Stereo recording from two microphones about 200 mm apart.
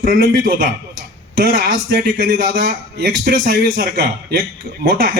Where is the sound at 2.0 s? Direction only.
45° right (ahead or behind).